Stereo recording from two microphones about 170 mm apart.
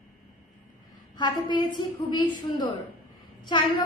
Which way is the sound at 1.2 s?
25° left (ahead or behind).